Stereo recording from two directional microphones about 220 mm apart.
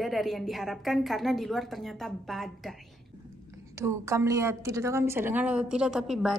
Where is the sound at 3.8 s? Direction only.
15° right (ahead or behind).